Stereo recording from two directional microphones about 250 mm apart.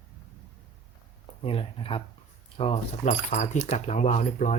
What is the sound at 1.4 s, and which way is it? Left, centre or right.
Speech, left.